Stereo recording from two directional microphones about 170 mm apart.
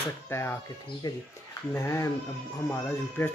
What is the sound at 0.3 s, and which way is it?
Speech, 15° left (ahead or behind).